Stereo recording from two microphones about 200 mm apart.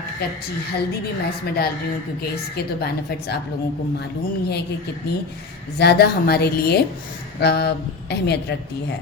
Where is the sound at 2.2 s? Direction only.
50° left (ahead or behind).